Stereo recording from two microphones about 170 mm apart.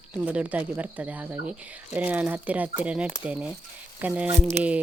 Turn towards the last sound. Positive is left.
turn(degrees=-5)  # may be behind; listen again after turning